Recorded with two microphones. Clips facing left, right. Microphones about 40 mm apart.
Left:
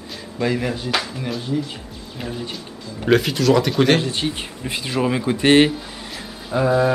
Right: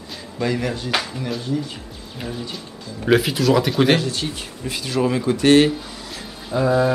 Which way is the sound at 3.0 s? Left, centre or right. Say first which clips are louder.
Left 1 dB; centre.